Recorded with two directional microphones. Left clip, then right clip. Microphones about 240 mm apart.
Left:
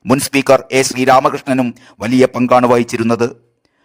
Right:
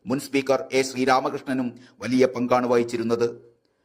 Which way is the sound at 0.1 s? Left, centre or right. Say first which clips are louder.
Left 12 dB; left.